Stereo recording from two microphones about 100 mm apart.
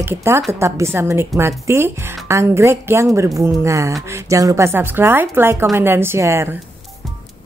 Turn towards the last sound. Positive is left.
turn(degrees=-30)  # may be behind; listen again after turning